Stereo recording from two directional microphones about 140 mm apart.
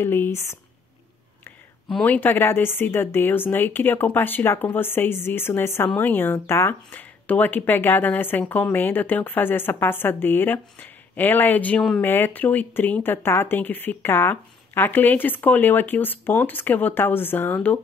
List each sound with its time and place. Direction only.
0.0 s speech: 15° left (ahead or behind)
1.9 s speech: 5° left (ahead or behind)
2.1 s speech: 15° left (ahead or behind)